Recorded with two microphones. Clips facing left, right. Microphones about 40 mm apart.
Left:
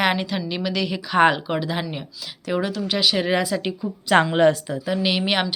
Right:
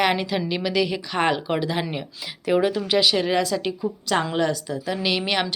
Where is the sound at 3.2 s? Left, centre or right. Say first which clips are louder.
Even; centre.